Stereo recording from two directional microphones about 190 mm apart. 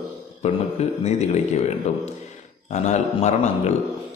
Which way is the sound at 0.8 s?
35° left (ahead or behind).